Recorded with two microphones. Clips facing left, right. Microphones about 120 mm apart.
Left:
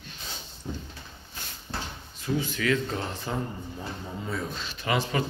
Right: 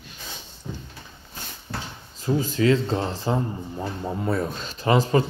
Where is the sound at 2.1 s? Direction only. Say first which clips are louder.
Right 6 dB; 35° right (ahead or behind).